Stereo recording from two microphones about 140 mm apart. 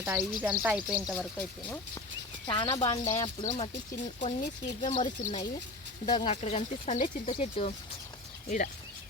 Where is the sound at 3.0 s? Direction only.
25° left (ahead or behind).